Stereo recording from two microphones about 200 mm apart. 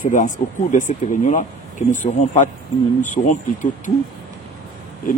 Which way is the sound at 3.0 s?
40° left (ahead or behind).